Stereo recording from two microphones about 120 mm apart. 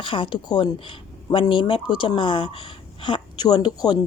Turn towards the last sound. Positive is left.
turn(degrees=35)  # may be behind; listen again after turning